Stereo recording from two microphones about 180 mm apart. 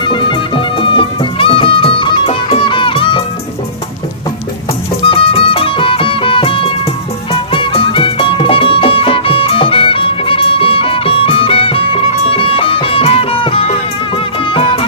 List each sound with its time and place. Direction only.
0.0 s music: 25° left (ahead or behind)
5.0 s music: 30° left (ahead or behind)